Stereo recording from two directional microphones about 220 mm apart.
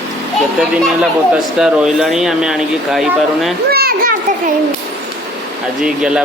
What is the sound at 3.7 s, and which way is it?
Children playing, 40° right (ahead or behind).